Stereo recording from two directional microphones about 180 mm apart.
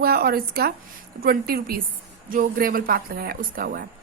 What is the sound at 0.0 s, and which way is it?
A woman's voice, 60° right (ahead or behind).